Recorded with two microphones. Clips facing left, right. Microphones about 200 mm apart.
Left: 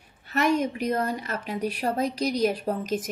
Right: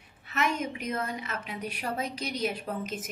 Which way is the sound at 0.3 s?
35° left (ahead or behind).